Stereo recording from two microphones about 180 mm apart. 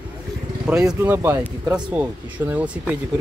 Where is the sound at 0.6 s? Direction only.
5° right (ahead or behind).